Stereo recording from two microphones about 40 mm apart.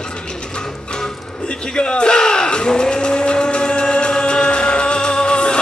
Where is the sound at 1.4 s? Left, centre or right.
Left.